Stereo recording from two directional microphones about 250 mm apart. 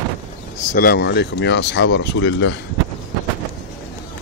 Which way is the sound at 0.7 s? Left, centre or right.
Left.